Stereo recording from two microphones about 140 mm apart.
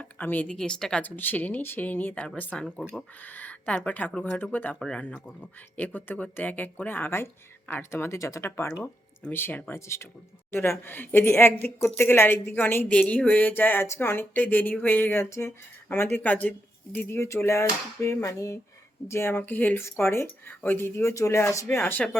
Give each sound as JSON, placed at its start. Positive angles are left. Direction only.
{"t": 0.0, "sound": "speech", "side_deg": 10}